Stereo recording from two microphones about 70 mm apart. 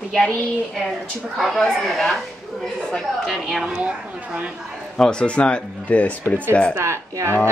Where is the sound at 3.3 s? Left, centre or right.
Centre.